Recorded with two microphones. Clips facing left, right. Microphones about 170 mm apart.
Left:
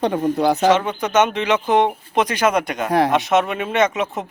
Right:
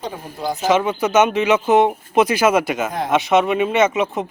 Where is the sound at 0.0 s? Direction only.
70° left (ahead or behind).